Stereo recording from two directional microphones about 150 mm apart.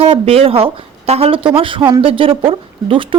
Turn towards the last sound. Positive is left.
turn(degrees=-35)  # may be behind; listen again after turning